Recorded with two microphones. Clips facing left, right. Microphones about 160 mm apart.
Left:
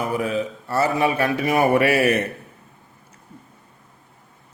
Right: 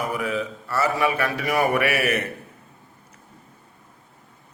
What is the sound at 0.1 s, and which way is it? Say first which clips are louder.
A man's voice: left 3 dB; 25° left (ahead or behind).